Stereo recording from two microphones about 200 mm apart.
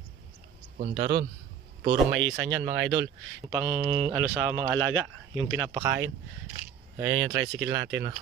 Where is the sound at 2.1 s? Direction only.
65° right (ahead or behind).